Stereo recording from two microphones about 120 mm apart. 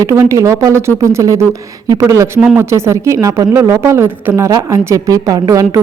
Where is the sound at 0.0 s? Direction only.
25° right (ahead or behind).